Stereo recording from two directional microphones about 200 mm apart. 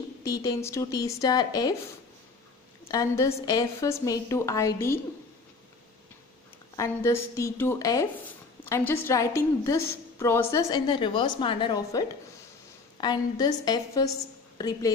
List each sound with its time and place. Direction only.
0.2 s a woman's voice: 15° left (ahead or behind)
2.9 s a woman's voice: 15° left (ahead or behind)
6.8 s a woman's voice: 15° left (ahead or behind)